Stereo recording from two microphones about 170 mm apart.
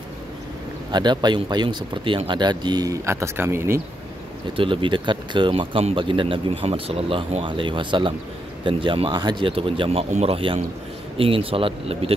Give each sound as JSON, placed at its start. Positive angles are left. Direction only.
{"t": 0.9, "sound": "speech", "side_deg": -25}
{"t": 4.6, "sound": "speech", "side_deg": -30}